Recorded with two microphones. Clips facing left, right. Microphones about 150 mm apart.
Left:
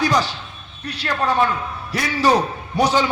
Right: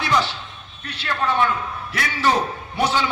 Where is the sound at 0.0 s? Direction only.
40° left (ahead or behind).